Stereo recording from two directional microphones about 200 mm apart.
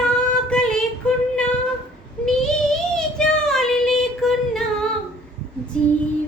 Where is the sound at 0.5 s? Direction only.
5° left (ahead or behind).